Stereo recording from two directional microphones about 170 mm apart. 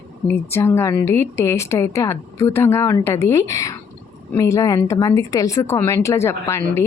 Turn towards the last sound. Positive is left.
turn(degrees=15)  # may be behind; listen again after turning